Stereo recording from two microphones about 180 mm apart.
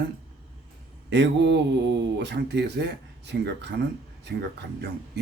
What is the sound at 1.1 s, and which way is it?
Speech, 70° right (ahead or behind).